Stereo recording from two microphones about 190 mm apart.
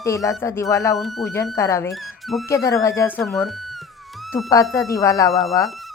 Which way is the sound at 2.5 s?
15° left (ahead or behind).